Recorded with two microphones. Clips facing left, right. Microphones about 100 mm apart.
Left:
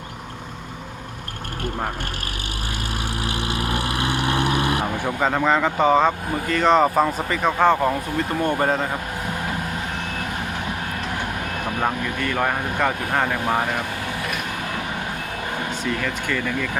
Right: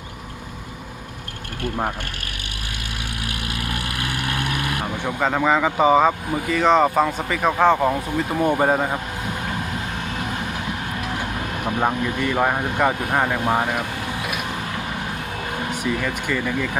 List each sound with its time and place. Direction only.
3.2 s vehicle: 25° left (ahead or behind)
5.0 s speech: centre (ahead or behind)
11.6 s speech: 15° right (ahead or behind)
15.7 s speech: 10° right (ahead or behind)